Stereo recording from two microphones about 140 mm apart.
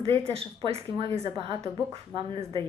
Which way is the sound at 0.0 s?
45° right (ahead or behind).